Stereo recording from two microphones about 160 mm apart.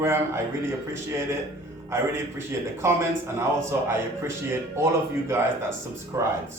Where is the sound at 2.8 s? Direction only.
15° right (ahead or behind).